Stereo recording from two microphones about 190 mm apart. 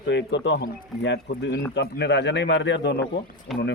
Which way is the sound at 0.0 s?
65° left (ahead or behind).